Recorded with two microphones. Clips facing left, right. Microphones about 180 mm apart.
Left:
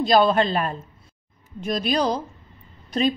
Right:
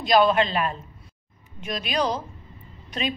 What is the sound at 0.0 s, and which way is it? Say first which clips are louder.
A woman's voice: left 1 dB; 35° left (ahead or behind).